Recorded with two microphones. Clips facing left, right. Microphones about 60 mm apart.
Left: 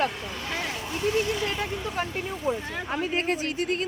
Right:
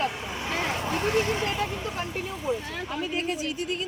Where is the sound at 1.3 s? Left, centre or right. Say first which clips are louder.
Right 1 dB; right.